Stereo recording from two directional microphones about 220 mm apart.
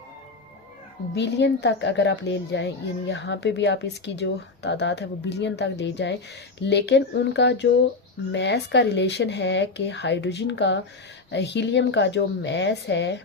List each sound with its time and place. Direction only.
1.1 s a woman's voice: 50° left (ahead or behind)